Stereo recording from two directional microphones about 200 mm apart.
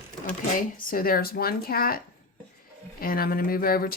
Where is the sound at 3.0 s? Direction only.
45° left (ahead or behind).